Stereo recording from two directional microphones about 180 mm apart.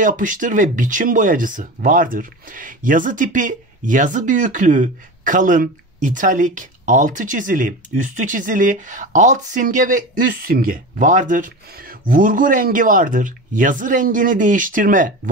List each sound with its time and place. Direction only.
0.0 s speech: 45° right (ahead or behind)